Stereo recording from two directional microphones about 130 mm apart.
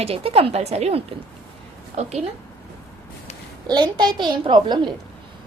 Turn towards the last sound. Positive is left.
turn(degrees=-35)  # may be behind; listen again after turning